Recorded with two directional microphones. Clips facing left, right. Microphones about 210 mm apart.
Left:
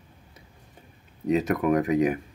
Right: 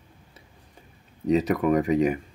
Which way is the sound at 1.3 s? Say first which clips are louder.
Right 1 dB; centre (ahead or behind).